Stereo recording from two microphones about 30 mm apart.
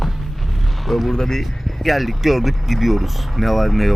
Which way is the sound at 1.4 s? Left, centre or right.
Centre.